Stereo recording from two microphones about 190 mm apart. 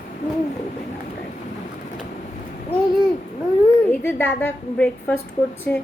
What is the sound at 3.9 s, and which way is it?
A woman's voice, 10° left (ahead or behind).